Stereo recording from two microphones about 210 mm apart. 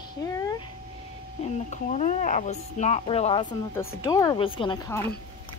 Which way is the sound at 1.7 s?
35° left (ahead or behind).